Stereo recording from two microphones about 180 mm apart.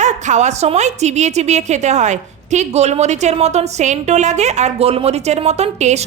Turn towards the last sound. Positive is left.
turn(degrees=-40)  # may be behind; listen again after turning